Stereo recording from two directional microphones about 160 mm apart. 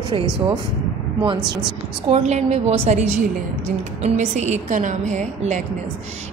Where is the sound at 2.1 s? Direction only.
45° right (ahead or behind).